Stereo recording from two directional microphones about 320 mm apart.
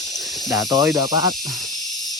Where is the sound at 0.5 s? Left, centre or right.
Centre.